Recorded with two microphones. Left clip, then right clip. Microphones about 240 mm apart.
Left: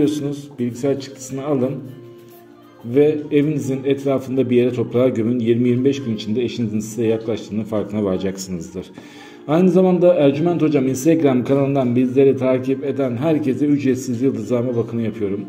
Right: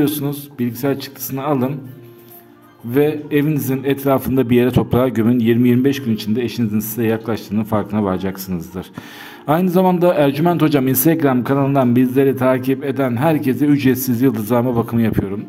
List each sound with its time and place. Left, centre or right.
0.0 s a man's voice: right
2.9 s a man's voice: right
9.5 s a man's voice: right
11.1 s a man's voice: right